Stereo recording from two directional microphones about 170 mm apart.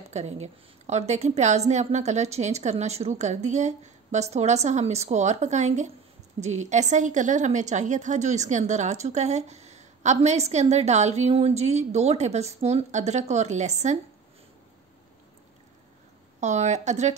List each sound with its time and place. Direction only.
0.1 s a woman's voice: 40° right (ahead or behind)
16.3 s a woman's voice: 45° right (ahead or behind)